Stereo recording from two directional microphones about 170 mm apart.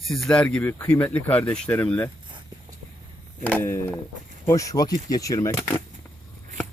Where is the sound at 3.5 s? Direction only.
15° left (ahead or behind).